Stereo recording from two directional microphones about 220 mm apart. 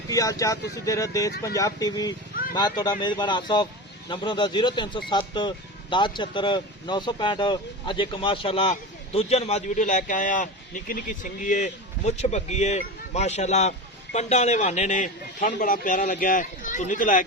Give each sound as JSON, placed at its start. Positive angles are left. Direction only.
{"t": 0.1, "sound": "speech", "side_deg": 15}